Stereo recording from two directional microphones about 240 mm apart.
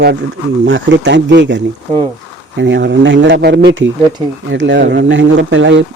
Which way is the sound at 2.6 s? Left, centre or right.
Right.